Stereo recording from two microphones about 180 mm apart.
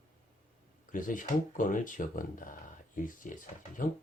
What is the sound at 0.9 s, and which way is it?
Speech, 50° left (ahead or behind).